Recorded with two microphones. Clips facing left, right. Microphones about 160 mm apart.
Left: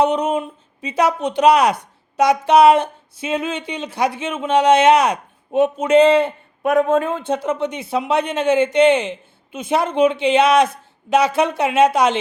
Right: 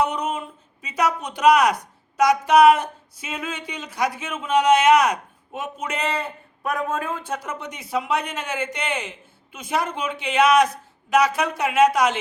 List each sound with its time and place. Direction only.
0.0 s speech: 25° left (ahead or behind)